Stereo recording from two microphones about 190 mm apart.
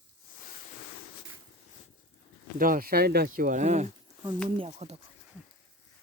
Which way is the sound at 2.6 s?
50° right (ahead or behind).